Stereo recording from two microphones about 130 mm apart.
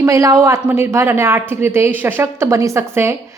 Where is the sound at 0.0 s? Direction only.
25° right (ahead or behind).